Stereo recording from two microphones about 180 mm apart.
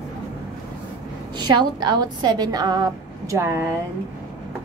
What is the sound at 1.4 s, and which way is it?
A woman's voice, 25° right (ahead or behind).